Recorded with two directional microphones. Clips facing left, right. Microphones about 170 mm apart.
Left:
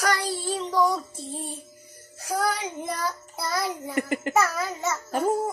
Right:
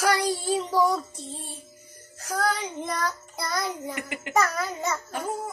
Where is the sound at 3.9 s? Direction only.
40° left (ahead or behind).